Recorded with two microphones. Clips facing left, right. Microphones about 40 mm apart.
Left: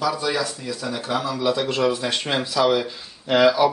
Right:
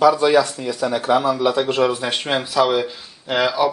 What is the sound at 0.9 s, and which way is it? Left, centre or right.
Speech, right.